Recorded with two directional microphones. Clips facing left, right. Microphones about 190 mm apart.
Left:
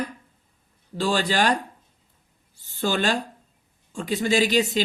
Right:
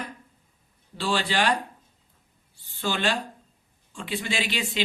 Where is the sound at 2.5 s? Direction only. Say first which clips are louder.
Left 5 dB; 45° left (ahead or behind).